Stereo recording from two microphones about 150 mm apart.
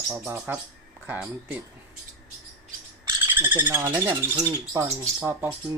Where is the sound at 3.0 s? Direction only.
15° right (ahead or behind).